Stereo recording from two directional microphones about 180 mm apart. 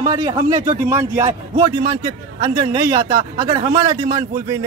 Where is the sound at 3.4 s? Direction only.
20° right (ahead or behind).